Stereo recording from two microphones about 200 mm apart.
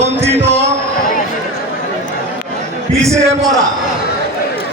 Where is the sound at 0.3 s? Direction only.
35° right (ahead or behind).